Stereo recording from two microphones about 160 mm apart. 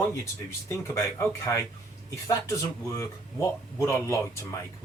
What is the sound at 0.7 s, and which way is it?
A man's voice, 15° left (ahead or behind).